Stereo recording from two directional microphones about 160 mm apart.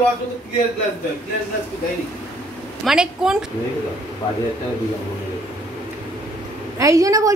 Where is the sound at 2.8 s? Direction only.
5° right (ahead or behind).